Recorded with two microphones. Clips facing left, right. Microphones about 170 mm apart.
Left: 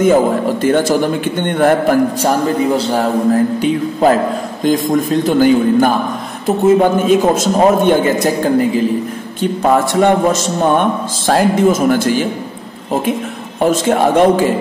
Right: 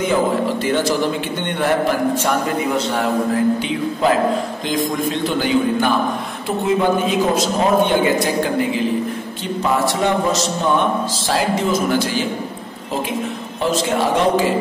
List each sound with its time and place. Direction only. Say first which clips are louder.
0.0 s a man's voice: left 6 dB; 45° left (ahead or behind)
9.4 s a man's voice: left 7 dB; 50° left (ahead or behind)
13.6 s a man's voice: left 6 dB; 50° left (ahead or behind)